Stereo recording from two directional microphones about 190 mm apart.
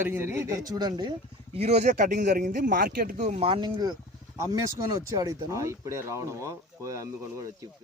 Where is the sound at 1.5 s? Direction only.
35° right (ahead or behind); by 3.2 s 55° right (ahead or behind).